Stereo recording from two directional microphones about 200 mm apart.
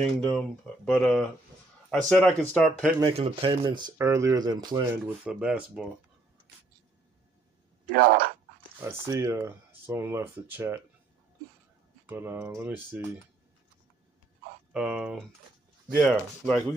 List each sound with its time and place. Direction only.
0.0 s speech: 5° left (ahead or behind)
3.1 s speech: 25° right (ahead or behind)
5.0 s speech: 5° right (ahead or behind)
7.9 s speech: 45° right (ahead or behind)
9.0 s speech: 15° right (ahead or behind)
12.1 s speech: 10° right (ahead or behind)
14.7 s speech: centre (ahead or behind)